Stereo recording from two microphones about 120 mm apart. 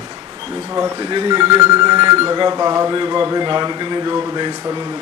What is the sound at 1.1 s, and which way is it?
Speech, 40° right (ahead or behind).